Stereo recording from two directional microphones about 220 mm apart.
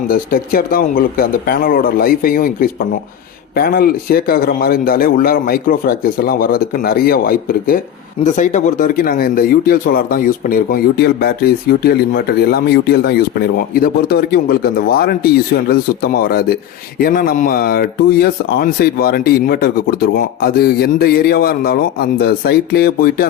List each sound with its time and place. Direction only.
0.1 s speech: 40° left (ahead or behind)